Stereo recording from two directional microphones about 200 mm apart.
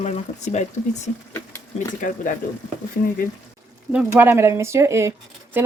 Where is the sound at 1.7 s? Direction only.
40° left (ahead or behind).